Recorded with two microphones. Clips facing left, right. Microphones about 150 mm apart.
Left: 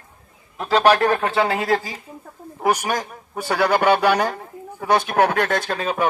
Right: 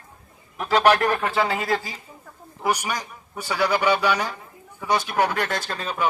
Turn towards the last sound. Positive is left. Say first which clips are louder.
# left 4 dB
turn(degrees=55)  # may be behind; listen again after turning